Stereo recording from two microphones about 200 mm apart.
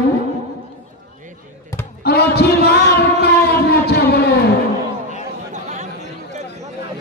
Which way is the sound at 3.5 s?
50° left (ahead or behind).